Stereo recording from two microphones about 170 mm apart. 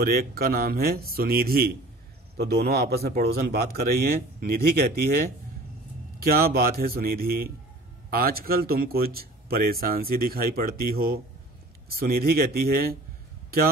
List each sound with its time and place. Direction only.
0.0 s speech: 60° right (ahead or behind)